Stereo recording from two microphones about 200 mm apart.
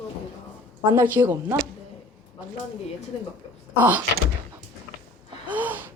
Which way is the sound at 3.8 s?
10° right (ahead or behind).